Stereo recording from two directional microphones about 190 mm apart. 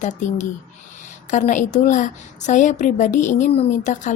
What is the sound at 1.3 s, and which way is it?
Speech, 40° left (ahead or behind).